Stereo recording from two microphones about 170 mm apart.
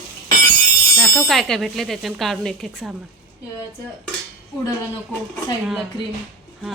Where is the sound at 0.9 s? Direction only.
Centre (ahead or behind).